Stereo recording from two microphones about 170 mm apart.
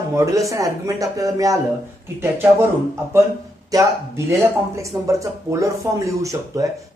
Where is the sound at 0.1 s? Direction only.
20° right (ahead or behind).